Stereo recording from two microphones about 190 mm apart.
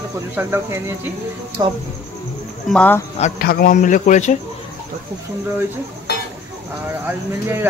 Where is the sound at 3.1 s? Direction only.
40° left (ahead or behind).